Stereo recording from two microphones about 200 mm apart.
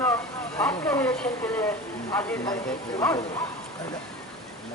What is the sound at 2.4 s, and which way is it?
Speech, 15° left (ahead or behind).